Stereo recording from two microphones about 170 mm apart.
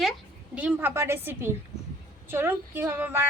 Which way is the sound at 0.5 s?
10° right (ahead or behind).